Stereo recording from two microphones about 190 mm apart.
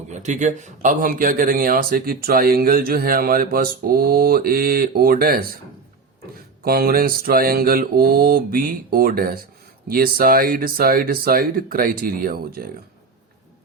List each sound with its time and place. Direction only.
0.1 s speech: 40° right (ahead or behind)
6.7 s speech: 50° right (ahead or behind)